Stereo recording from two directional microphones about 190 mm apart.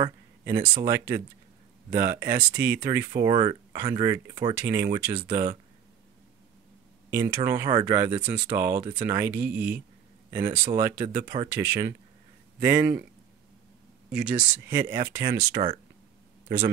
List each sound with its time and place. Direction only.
0.8 s speech: 15° right (ahead or behind)
3.3 s speech: 25° right (ahead or behind)
7.1 s speech: 15° right (ahead or behind)
14.1 s speech: 5° right (ahead or behind)
15.5 s speech: 30° right (ahead or behind)
16.4 s a man's voice: 15° right (ahead or behind)